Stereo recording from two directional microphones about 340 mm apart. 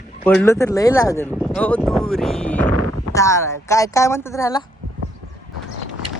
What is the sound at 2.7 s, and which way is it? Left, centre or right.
Speech, right.